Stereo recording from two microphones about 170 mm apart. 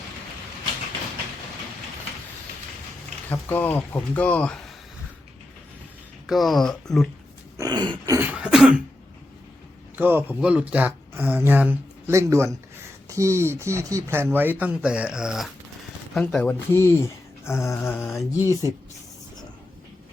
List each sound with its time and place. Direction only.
3.2 s speech: 10° left (ahead or behind)
6.2 s speech: centre (ahead or behind)
7.5 s a sound: 20° right (ahead or behind)
8.2 s speech: 10° right (ahead or behind)
9.9 s speech: 10° right (ahead or behind); by 18.3 s 15° left (ahead or behind)